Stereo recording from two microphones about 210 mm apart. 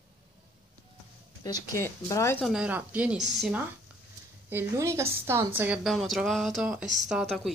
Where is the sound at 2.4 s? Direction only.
5° right (ahead or behind).